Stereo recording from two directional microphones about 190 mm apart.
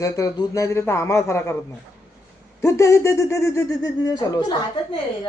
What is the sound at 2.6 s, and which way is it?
Speech, 15° left (ahead or behind).